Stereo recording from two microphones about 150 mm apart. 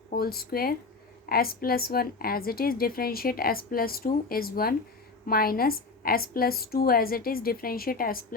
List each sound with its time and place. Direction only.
0.1 s a woman's voice: 90° left; by 8.2 s 75° left (ahead or behind)